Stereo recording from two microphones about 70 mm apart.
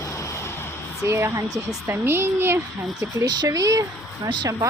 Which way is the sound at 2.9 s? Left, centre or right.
Right.